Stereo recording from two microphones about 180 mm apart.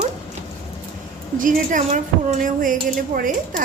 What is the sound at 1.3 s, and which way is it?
A woman's voice, 45° right (ahead or behind).